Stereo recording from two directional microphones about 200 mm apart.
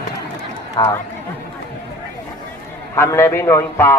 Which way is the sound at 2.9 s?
15° left (ahead or behind).